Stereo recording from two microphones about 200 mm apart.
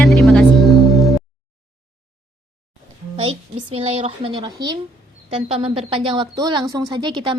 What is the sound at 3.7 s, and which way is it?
A woman's voice, 30° right (ahead or behind).